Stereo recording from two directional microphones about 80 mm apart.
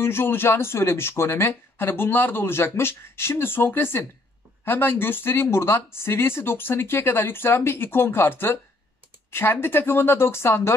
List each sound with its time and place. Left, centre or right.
0.0 s speech: left